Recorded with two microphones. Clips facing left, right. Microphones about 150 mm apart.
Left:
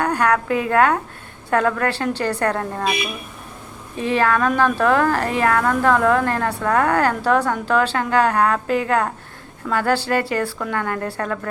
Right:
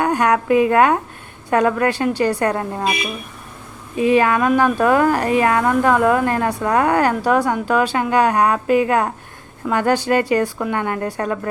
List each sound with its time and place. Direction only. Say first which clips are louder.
0.0 s a woman's voice: right 2 dB; 15° right (ahead or behind)
3.9 s a woman's voice: right 4 dB; 15° right (ahead or behind)